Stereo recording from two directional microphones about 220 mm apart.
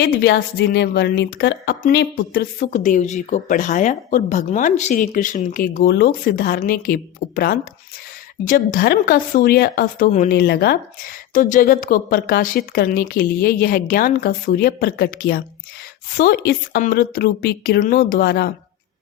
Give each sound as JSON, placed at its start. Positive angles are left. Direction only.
{"t": 0.0, "sound": "a woman's voice", "side_deg": 45}